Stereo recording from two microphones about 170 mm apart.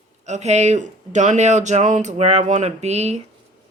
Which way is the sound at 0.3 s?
40° right (ahead or behind).